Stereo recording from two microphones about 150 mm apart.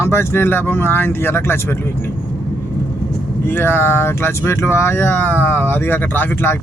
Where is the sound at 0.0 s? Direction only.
15° left (ahead or behind).